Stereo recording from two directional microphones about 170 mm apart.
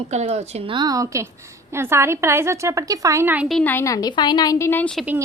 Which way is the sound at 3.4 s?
5° left (ahead or behind).